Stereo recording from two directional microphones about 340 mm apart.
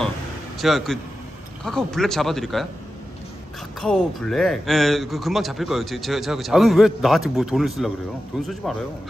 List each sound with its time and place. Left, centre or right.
0.6 s speech: centre
3.8 s speech: centre